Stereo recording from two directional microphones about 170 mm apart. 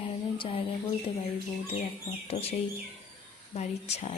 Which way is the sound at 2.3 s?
35° left (ahead or behind).